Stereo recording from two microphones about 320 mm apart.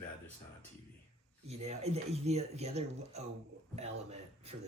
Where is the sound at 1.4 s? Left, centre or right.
Centre.